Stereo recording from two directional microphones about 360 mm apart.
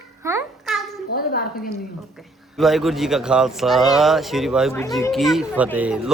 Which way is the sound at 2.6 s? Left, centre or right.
Centre.